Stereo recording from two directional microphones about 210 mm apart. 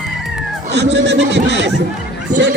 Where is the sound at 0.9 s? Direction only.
55° right (ahead or behind).